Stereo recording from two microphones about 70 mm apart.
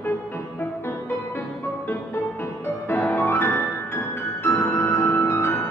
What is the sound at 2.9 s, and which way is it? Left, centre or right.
Music, left.